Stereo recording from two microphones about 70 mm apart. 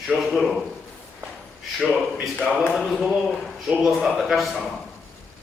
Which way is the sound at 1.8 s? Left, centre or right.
Centre.